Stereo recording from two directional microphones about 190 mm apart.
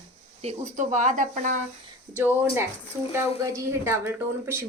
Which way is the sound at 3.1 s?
15° right (ahead or behind).